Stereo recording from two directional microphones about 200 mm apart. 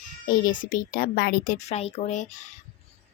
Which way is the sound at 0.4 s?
40° left (ahead or behind).